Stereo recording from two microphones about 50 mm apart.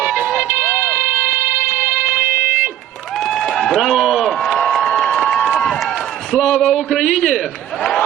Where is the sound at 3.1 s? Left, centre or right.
Centre.